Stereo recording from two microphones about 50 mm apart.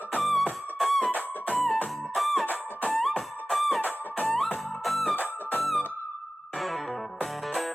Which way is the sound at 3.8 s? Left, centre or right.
Left.